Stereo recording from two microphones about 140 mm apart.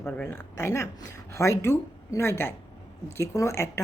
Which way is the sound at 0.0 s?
15° left (ahead or behind).